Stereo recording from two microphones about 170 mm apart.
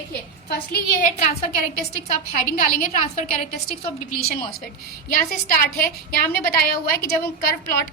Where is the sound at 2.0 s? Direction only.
45° left (ahead or behind).